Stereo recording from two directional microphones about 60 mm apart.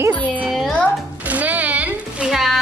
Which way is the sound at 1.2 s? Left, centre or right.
Right.